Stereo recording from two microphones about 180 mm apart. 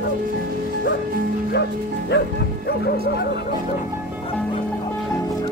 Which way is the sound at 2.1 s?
70° left (ahead or behind).